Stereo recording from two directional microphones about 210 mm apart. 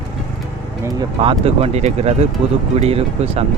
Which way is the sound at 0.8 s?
20° right (ahead or behind).